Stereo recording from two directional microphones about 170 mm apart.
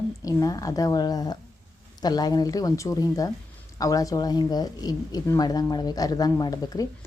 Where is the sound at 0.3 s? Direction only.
20° left (ahead or behind).